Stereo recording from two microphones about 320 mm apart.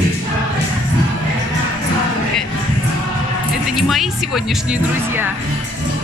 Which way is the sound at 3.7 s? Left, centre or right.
Centre.